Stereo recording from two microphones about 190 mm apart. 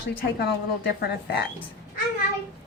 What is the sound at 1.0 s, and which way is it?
Speech, 55° left (ahead or behind).